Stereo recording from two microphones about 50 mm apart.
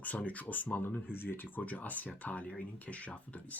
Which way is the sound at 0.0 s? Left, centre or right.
Left.